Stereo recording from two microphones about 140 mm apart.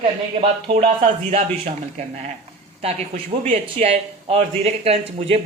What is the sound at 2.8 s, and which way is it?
Speech, 50° right (ahead or behind).